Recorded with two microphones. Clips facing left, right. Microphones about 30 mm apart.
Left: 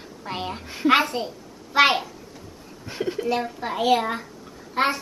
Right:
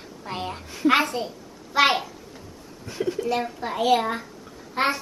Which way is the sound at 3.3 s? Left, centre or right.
Centre.